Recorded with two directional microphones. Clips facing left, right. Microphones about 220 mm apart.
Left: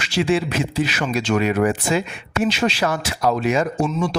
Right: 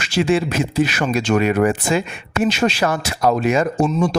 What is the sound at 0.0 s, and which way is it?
Speech, 50° right (ahead or behind).